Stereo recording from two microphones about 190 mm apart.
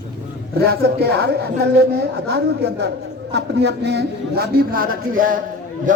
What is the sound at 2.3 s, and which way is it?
A woman's voice, 60° right (ahead or behind).